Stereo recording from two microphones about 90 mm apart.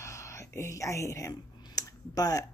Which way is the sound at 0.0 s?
35° left (ahead or behind).